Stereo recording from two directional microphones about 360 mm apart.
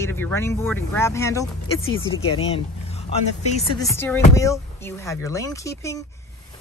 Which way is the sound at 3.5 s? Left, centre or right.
Centre.